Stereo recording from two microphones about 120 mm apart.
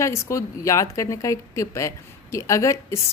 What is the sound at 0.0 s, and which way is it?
Speech, 25° left (ahead or behind).